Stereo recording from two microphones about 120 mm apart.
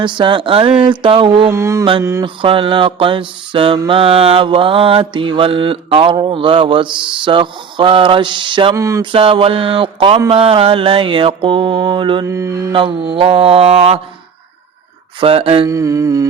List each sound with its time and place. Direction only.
0.0 s mantra: 40° right (ahead or behind)
1.5 s music: 25° right (ahead or behind)
1.8 s mantra: 40° right (ahead or behind)
8.7 s music: 25° right (ahead or behind)
9.0 s mantra: 45° right (ahead or behind)
12.2 s music: 25° right (ahead or behind)
12.7 s mantra: 45° right (ahead or behind)
15.2 s mantra: 50° right (ahead or behind)
15.6 s music: 25° right (ahead or behind)